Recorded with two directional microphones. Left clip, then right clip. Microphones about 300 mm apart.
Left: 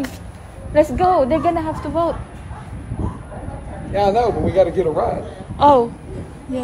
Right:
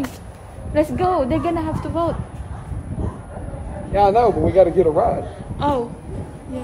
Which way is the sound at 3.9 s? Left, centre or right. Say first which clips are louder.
Right 2 dB; right.